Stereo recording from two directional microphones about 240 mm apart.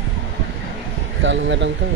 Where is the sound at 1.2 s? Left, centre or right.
Right.